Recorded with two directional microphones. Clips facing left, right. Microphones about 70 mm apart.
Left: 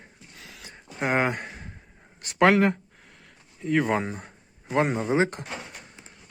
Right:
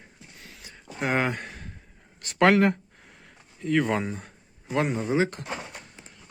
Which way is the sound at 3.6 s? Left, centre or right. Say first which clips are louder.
Even; centre.